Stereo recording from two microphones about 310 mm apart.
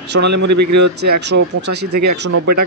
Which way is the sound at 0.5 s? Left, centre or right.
Right.